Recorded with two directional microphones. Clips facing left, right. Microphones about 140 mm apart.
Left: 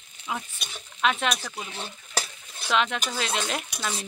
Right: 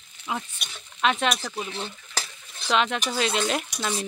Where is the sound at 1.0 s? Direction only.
Centre (ahead or behind).